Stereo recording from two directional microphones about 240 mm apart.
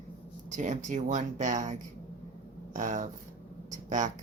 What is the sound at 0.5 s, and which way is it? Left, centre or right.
A woman's voice, right.